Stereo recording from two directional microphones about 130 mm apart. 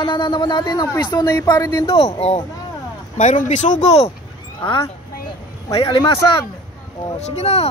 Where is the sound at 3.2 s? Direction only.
65° left (ahead or behind).